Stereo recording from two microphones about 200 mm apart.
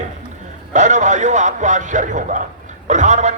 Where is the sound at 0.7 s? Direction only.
35° right (ahead or behind).